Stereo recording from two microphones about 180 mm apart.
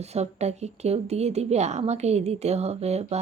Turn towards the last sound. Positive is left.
turn(degrees=-35)  # may be behind; listen again after turning